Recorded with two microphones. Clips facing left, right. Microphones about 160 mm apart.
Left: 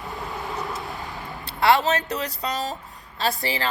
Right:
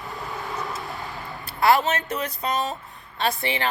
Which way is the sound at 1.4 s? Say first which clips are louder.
Even; 30° left (ahead or behind).